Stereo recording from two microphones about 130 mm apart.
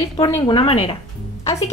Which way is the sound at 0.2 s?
40° left (ahead or behind).